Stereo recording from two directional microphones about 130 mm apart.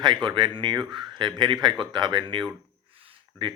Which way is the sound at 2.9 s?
40° right (ahead or behind).